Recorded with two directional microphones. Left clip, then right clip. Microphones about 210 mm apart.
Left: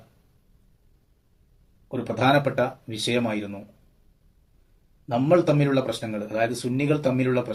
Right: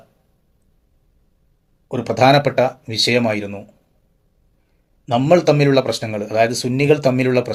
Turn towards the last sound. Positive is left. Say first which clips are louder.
# right 7 dB
turn(degrees=-40)  # may be behind; listen again after turning